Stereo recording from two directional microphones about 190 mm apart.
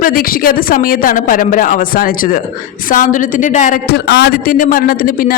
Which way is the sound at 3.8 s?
60° left (ahead or behind).